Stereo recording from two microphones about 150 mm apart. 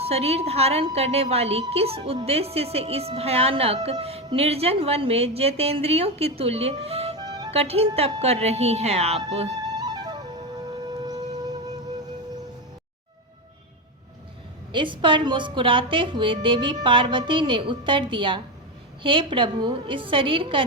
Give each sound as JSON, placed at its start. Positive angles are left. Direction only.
{"t": 0.0, "sound": "a woman's voice", "side_deg": -45}
{"t": 7.2, "sound": "music", "side_deg": -25}
{"t": 7.5, "sound": "a woman's voice", "side_deg": -40}
{"t": 9.8, "sound": "flute", "side_deg": -30}
{"t": 14.7, "sound": "a woman's voice", "side_deg": -35}